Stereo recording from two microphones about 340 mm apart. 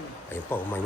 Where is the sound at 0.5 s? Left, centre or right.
Centre.